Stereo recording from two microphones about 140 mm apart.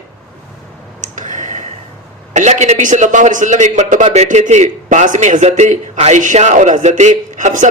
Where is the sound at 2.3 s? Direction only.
55° right (ahead or behind).